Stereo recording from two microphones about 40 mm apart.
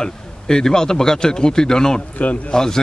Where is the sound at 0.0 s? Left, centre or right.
Centre.